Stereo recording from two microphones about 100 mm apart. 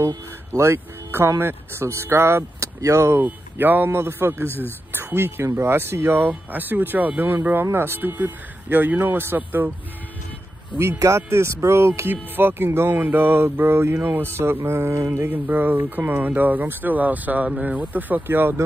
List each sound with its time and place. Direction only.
0.1 s speech: 30° right (ahead or behind)
10.8 s speech: 30° right (ahead or behind)